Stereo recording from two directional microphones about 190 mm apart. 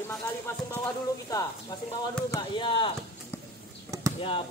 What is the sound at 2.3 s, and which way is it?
Speech, 25° left (ahead or behind).